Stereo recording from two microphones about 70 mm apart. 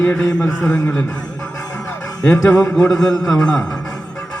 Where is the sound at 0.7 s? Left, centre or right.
Left.